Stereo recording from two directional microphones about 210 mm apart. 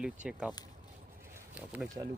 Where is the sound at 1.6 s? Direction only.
10° right (ahead or behind).